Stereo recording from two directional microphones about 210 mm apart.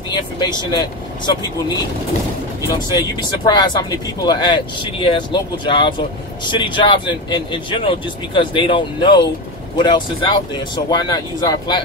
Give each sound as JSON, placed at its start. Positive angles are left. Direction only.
{"t": 0.1, "sound": "speech", "side_deg": 20}
{"t": 3.4, "sound": "speech", "side_deg": 20}